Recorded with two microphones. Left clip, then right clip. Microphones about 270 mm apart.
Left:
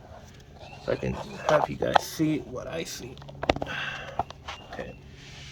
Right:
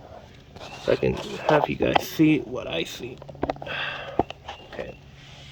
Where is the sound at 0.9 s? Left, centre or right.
Right.